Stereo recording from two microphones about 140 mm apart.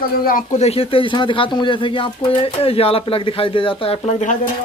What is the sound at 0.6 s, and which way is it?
Speech, 45° left (ahead or behind).